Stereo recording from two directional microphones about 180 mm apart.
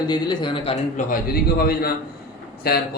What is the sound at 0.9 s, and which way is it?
A man's voice, 55° left (ahead or behind).